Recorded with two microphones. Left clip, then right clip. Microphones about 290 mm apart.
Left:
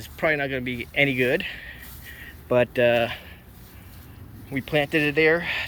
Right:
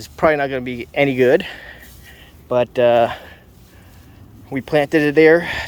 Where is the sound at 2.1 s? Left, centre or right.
Centre.